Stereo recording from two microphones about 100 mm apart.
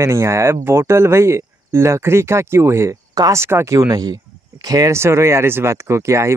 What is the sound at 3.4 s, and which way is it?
Speech, 25° right (ahead or behind).